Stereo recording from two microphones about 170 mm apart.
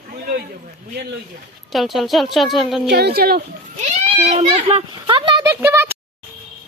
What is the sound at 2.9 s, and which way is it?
Speech, 70° right (ahead or behind).